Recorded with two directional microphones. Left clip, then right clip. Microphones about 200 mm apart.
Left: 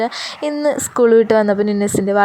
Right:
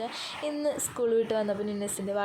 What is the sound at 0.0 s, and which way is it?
A woman's voice, 45° left (ahead or behind).